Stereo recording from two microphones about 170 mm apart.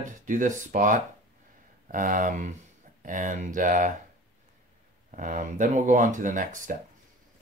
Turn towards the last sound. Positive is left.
turn(degrees=-50)  # may be behind; listen again after turning